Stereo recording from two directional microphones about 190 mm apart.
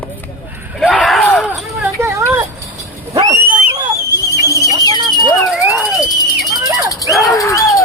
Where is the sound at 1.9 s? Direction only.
15° right (ahead or behind).